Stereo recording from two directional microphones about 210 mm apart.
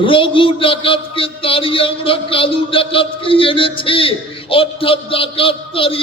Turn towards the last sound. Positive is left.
turn(degrees=25)  # may be behind; listen again after turning